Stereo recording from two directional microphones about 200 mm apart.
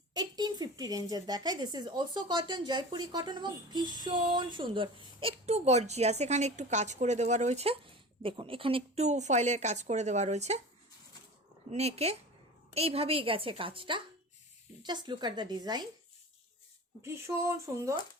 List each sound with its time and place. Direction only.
0.1 s speech: 20° right (ahead or behind)
11.7 s speech: 30° right (ahead or behind)
17.0 s speech: 15° right (ahead or behind)